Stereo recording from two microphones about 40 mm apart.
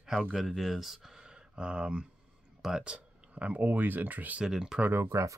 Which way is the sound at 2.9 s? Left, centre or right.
Right.